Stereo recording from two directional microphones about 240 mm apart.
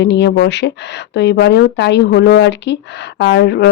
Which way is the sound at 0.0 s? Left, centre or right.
Left.